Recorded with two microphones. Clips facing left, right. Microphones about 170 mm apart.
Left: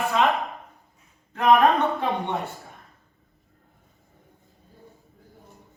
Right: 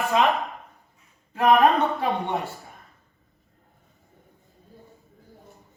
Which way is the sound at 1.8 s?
Centre (ahead or behind).